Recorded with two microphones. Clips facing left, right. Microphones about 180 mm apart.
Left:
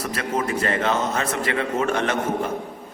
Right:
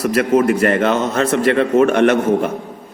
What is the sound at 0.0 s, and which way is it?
A man's voice, 70° right (ahead or behind).